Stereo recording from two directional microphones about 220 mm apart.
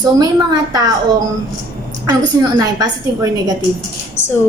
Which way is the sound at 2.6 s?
15° right (ahead or behind).